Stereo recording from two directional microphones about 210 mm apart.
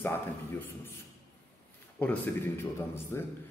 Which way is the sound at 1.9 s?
10° left (ahead or behind).